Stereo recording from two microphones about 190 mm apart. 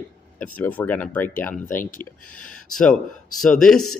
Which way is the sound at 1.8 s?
45° left (ahead or behind).